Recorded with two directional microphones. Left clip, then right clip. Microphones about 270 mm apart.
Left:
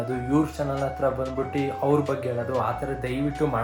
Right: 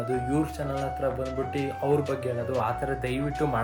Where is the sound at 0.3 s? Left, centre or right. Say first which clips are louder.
Left 4 dB; centre.